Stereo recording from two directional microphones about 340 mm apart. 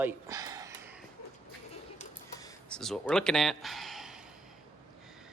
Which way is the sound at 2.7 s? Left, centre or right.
Centre.